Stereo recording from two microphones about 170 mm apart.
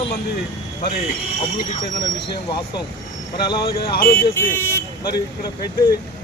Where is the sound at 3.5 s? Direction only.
30° left (ahead or behind).